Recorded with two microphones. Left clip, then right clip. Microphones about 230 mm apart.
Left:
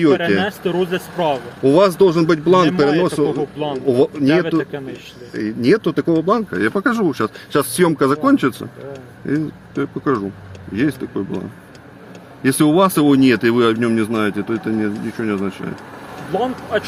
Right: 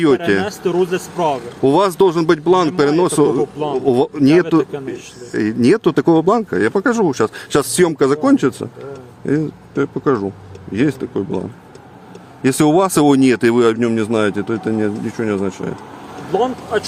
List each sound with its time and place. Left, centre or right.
0.4 s speech: centre
1.6 s speech: right
3.3 s speech: right
3.8 s speech: right
12.4 s speech: right
16.3 s speech: centre